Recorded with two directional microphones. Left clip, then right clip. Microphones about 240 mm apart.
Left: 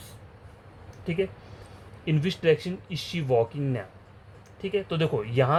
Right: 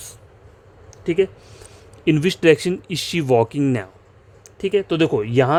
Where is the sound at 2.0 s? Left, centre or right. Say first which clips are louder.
Right 9 dB; right.